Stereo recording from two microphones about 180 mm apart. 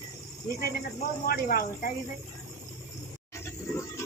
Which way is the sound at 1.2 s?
55° left (ahead or behind).